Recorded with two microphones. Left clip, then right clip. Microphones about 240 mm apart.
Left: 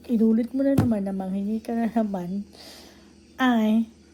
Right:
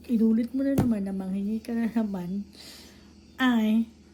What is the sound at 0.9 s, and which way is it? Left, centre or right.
A woman's voice, centre.